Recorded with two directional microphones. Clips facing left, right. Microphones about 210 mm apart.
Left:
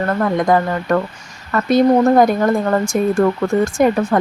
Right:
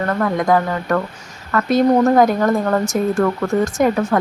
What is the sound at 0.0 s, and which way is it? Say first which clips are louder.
A woman's voice: left 2 dB; 10° left (ahead or behind).